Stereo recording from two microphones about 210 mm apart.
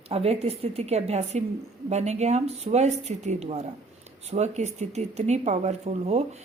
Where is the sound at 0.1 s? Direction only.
30° right (ahead or behind).